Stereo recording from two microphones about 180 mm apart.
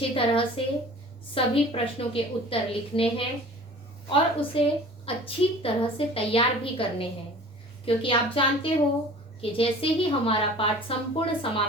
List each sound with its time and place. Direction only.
0.1 s a woman's voice: 30° left (ahead or behind)